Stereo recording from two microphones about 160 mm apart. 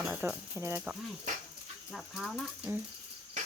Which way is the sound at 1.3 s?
55° right (ahead or behind).